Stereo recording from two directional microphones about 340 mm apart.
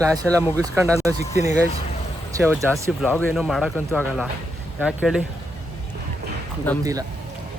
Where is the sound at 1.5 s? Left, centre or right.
Left.